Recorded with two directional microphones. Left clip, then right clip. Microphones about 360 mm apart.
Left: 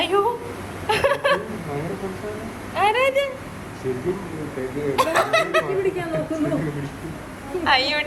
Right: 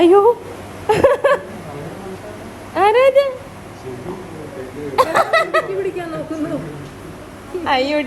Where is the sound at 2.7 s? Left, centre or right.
Right.